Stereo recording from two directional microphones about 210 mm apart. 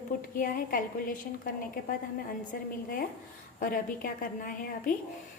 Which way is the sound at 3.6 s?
40° left (ahead or behind).